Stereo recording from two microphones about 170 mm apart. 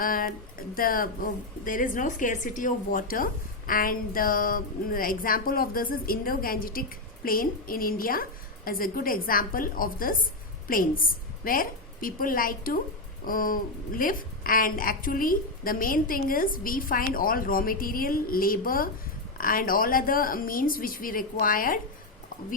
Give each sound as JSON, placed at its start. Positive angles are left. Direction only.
{"t": 0.0, "sound": "a woman's voice", "side_deg": 55}